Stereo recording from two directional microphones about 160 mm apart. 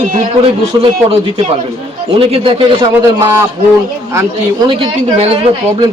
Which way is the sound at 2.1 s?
35° right (ahead or behind).